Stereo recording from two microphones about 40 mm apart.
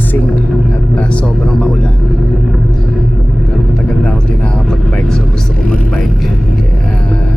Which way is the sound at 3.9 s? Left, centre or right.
Centre.